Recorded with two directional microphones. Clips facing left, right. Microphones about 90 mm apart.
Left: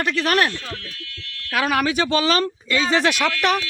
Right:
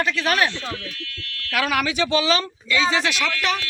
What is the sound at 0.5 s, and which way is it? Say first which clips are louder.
Speech: right 2 dB; 20° right (ahead or behind).